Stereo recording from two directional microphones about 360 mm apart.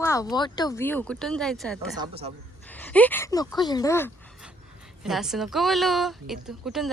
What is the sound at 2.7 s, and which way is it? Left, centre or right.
Speech, centre.